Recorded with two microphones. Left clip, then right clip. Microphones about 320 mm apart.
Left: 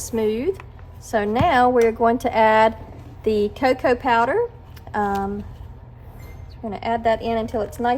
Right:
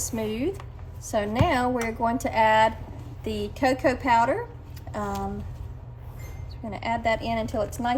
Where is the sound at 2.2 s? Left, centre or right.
Left.